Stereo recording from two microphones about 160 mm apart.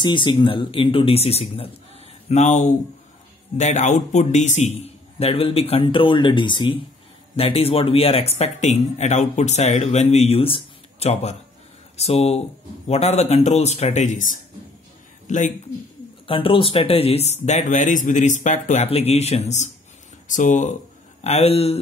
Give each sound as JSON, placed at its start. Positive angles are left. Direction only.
{"t": 0.0, "sound": "speech", "side_deg": 30}
{"t": 16.3, "sound": "speech", "side_deg": 35}